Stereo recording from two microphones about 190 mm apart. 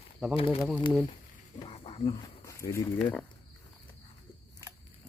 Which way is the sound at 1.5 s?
30° left (ahead or behind).